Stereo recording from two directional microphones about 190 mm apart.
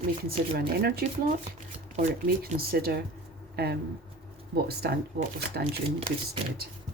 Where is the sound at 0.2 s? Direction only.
50° right (ahead or behind).